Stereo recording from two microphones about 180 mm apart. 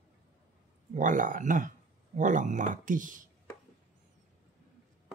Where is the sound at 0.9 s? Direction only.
45° right (ahead or behind).